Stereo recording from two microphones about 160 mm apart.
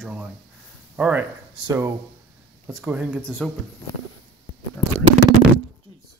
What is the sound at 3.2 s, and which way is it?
Speech, 5° left (ahead or behind).